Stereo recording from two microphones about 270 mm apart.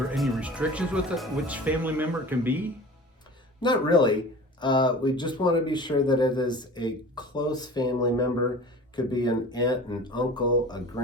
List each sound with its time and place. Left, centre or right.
0.2 s speech: centre
3.6 s speech: centre